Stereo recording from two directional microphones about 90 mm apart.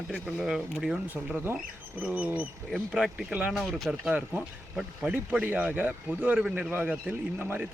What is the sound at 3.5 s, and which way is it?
Speech, centre (ahead or behind).